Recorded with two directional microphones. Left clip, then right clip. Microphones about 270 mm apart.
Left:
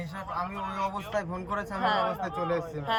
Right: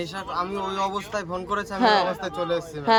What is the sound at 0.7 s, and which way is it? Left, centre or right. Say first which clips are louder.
Speech: right 5 dB; right.